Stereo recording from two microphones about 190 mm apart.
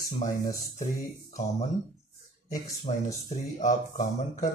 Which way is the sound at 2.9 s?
30° left (ahead or behind).